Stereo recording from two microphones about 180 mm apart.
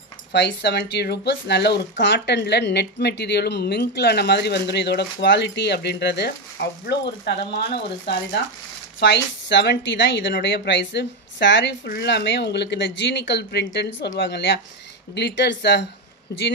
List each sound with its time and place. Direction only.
0.3 s speech: 70° left (ahead or behind)